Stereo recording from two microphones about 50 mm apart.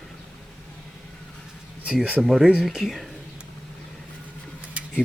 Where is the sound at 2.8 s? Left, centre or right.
Centre.